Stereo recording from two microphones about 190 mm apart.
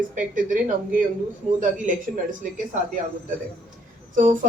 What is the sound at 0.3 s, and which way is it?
Speech, 45° right (ahead or behind).